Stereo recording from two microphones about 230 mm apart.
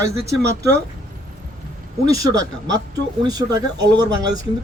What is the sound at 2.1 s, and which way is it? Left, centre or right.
Speech, centre.